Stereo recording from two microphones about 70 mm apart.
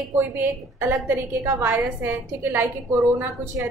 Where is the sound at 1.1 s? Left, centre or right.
Right.